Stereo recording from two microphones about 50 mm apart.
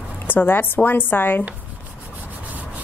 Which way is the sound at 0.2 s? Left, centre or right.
Left.